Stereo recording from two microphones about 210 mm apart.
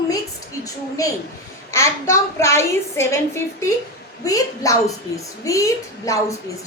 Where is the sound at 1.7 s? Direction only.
15° left (ahead or behind).